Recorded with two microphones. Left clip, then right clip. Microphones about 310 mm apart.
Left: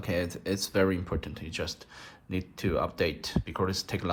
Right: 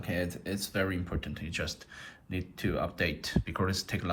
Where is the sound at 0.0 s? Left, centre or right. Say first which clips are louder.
Left 3 dB; centre.